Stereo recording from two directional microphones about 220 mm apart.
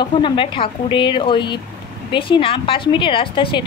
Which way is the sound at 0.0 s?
20° left (ahead or behind).